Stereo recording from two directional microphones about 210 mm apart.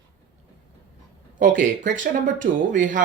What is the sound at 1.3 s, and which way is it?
Speech, 40° right (ahead or behind).